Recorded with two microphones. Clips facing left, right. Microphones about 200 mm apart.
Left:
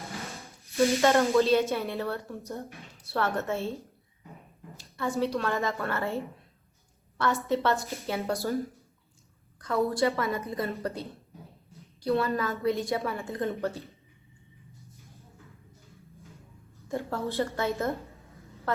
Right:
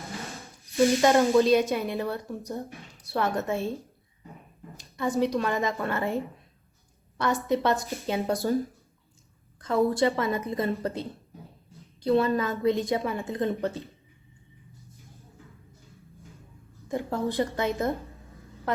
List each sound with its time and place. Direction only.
0.4 s snake: 15° right (ahead or behind)
1.0 s speech: 15° right (ahead or behind)
7.4 s speech: 15° right (ahead or behind)
9.6 s a woman's voice: 20° right (ahead or behind)
12.0 s a woman's voice: 20° right (ahead or behind)
16.9 s speech: 15° right (ahead or behind)